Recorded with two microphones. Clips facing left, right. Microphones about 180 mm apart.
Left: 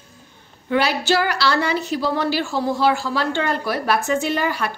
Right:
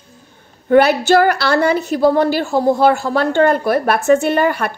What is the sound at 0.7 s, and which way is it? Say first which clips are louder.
Speech: right 8 dB; 50° right (ahead or behind).